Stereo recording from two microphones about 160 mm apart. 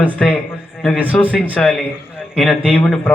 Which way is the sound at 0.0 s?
10° left (ahead or behind).